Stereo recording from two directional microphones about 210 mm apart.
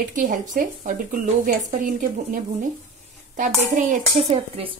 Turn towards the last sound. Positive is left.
turn(degrees=-30)  # may be behind; listen again after turning